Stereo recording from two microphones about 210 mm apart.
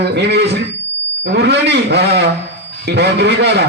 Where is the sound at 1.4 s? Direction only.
55° right (ahead or behind).